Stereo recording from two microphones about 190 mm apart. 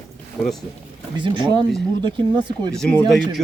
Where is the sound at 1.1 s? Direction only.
25° right (ahead or behind).